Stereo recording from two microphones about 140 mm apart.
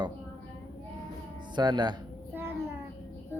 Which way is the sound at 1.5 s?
30° right (ahead or behind).